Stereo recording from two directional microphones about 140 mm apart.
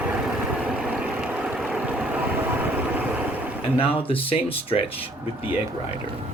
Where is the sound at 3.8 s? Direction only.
40° left (ahead or behind).